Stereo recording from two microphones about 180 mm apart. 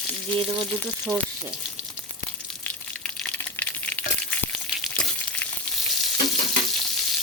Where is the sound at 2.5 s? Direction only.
5° left (ahead or behind).